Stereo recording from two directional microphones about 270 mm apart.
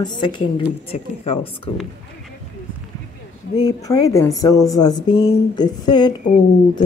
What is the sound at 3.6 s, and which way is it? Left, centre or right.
Speech, centre.